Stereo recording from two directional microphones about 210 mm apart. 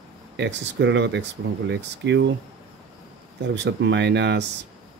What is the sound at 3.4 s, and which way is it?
Speech, 55° right (ahead or behind).